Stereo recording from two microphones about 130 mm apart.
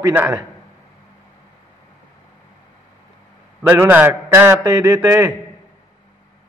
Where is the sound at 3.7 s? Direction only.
15° right (ahead or behind).